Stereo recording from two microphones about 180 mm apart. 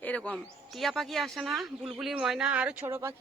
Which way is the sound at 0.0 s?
5° left (ahead or behind).